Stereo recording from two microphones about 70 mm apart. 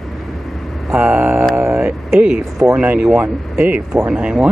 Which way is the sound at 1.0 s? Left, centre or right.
Right.